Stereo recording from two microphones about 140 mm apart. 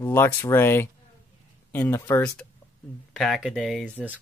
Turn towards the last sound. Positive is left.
turn(degrees=-10)  # may be behind; listen again after turning